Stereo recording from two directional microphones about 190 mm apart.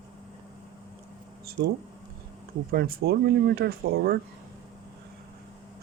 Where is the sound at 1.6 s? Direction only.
55° right (ahead or behind).